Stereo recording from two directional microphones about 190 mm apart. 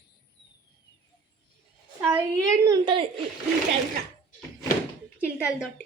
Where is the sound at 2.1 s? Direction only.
15° right (ahead or behind).